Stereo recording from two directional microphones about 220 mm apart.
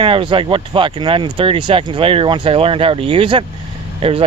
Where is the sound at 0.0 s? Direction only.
25° right (ahead or behind).